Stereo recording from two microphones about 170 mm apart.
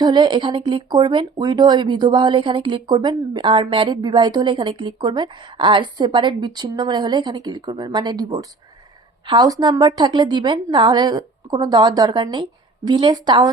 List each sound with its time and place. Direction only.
0.0 s speech: 25° right (ahead or behind)